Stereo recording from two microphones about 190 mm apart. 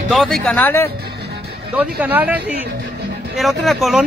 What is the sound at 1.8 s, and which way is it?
Speech, 10° right (ahead or behind).